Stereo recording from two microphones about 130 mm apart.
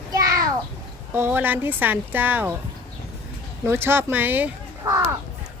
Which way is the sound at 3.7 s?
20° right (ahead or behind).